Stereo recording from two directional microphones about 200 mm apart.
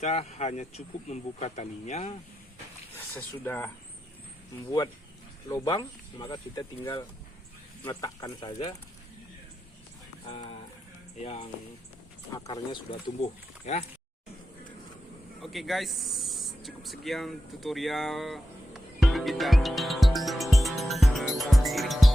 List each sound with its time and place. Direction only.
0.0 s speech: 35° left (ahead or behind)
2.9 s speech: 10° left (ahead or behind)
5.5 s speech: 15° left (ahead or behind)
10.2 s speech: 30° left (ahead or behind)
12.3 s speech: 20° left (ahead or behind)
13.7 s speech: 35° left (ahead or behind)
15.4 s snake: centre (ahead or behind)